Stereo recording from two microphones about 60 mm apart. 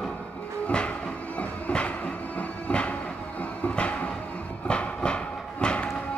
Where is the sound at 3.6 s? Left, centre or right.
Left.